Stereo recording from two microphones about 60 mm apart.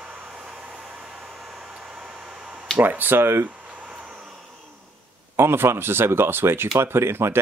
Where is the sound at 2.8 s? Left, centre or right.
Right.